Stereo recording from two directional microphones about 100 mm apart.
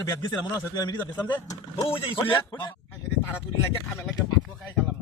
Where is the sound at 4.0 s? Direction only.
5° left (ahead or behind).